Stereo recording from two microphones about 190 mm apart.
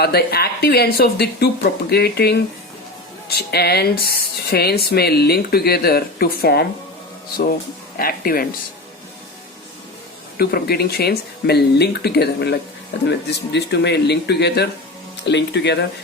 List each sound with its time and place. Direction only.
0.0 s speech: 55° left (ahead or behind)
7.9 s speech: 50° left (ahead or behind)
10.3 s speech: 55° left (ahead or behind)